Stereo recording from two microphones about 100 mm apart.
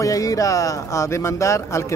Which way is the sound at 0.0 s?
35° left (ahead or behind).